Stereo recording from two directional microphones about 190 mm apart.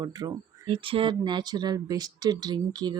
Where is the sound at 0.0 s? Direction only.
20° right (ahead or behind).